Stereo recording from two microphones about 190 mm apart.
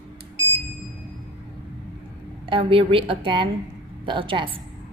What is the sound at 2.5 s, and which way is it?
A woman's voice, 30° right (ahead or behind).